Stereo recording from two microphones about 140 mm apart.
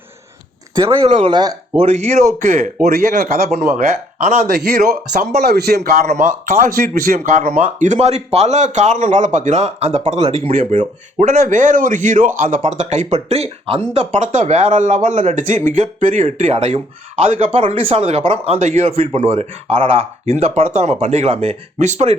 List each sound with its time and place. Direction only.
1.0 s speech: 45° right (ahead or behind)
1.3 s speech: 30° right (ahead or behind)
1.8 s speech: 50° right (ahead or behind)
2.8 s speech: 90° right
3.8 s speech: 60° right (ahead or behind); by 10.5 s 45° right (ahead or behind)
10.6 s speech: 55° right (ahead or behind)